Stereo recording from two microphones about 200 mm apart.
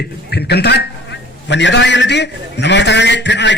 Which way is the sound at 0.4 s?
55° left (ahead or behind).